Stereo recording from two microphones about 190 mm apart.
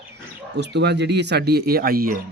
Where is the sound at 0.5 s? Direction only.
65° right (ahead or behind).